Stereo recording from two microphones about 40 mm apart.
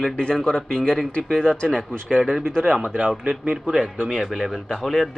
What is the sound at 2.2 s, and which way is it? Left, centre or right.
Speech, centre.